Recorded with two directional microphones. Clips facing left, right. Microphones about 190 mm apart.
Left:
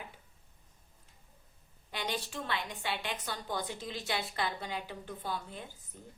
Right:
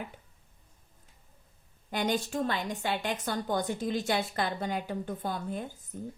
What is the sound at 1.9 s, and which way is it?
A woman's voice, 45° right (ahead or behind).